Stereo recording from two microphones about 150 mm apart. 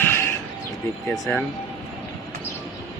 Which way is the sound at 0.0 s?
15° left (ahead or behind).